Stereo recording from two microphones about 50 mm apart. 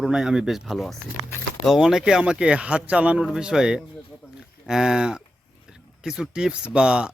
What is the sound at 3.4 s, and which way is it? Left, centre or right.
Speech, centre.